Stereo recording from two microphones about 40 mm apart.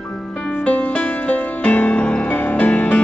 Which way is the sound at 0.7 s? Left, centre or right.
Left.